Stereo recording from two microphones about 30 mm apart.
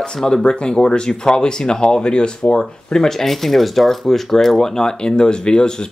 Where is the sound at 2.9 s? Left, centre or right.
Centre.